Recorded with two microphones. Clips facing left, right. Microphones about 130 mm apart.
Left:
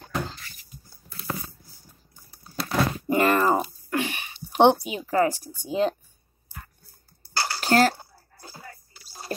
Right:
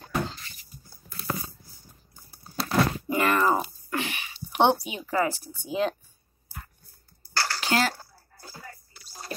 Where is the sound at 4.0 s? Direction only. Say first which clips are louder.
Left 4 dB; 50° left (ahead or behind).